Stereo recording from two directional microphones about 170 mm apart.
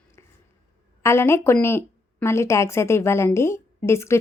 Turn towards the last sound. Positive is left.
turn(degrees=15)  # may be behind; listen again after turning